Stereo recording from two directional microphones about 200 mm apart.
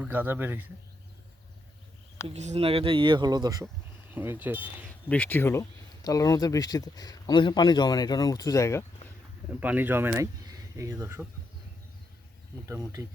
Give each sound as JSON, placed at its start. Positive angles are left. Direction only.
{"t": 0.0, "sound": "speech", "side_deg": -10}
{"t": 2.2, "sound": "speech", "side_deg": -35}
{"t": 4.9, "sound": "speech", "side_deg": 5}
{"t": 9.5, "sound": "speech", "side_deg": -10}
{"t": 12.6, "sound": "speech", "side_deg": -15}